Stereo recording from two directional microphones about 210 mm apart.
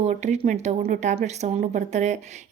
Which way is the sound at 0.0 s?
35° right (ahead or behind).